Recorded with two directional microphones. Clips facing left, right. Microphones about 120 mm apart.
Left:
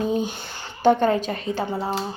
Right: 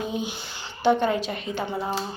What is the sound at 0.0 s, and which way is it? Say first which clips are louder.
A woman's voice: left 6 dB; 40° left (ahead or behind).